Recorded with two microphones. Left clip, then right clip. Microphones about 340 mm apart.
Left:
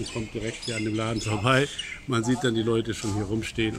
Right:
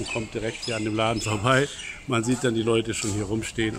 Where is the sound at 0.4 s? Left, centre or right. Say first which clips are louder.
Even; right.